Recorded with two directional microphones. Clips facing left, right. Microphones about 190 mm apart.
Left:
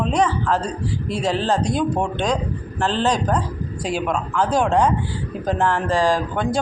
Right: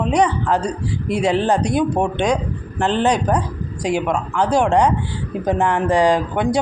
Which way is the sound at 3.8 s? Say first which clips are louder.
Right 4 dB; 15° right (ahead or behind).